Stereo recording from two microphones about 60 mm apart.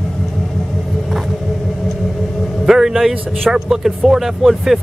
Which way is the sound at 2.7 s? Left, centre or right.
Centre.